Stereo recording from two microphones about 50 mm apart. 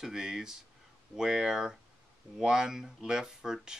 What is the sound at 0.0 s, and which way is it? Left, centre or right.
Speech, centre.